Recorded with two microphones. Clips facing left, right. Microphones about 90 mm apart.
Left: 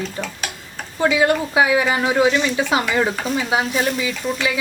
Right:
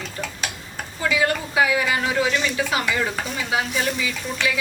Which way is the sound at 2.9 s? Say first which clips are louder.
Left 5 dB; 35° left (ahead or behind).